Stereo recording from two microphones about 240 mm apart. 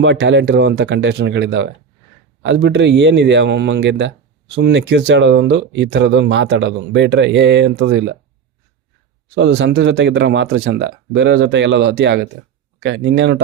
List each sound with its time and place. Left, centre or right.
0.0 s speech: right
9.3 s speech: right